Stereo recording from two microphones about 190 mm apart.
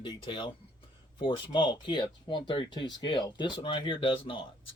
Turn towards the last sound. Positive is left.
turn(degrees=30)  # may be behind; listen again after turning